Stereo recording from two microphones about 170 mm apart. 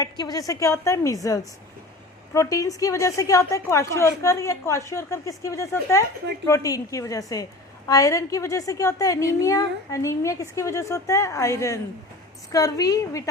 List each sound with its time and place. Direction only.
0.0 s a woman's voice: 20° left (ahead or behind)